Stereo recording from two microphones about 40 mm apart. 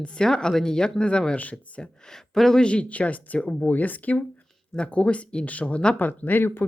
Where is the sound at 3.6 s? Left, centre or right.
Left.